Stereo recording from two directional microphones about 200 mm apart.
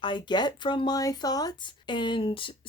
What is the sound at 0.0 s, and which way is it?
A woman's voice, 20° left (ahead or behind).